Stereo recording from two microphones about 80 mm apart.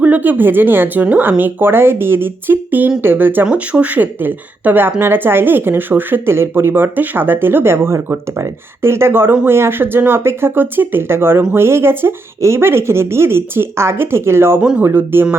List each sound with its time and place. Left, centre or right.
0.0 s speech: right
3.4 s speech: centre